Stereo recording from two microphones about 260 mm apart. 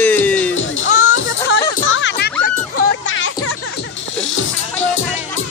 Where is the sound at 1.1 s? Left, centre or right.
Left.